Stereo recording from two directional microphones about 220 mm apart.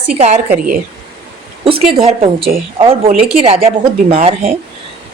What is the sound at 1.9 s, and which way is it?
Speech, 25° right (ahead or behind).